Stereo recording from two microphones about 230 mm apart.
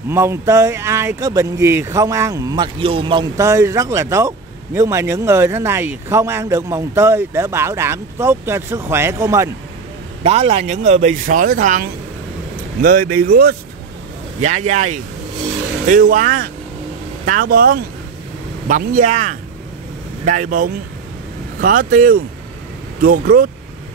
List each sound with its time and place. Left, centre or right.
0.1 s speech: centre
10.2 s a man's voice: right